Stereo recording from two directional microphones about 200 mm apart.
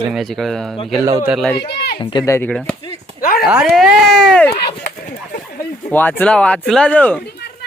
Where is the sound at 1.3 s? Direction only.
Centre (ahead or behind).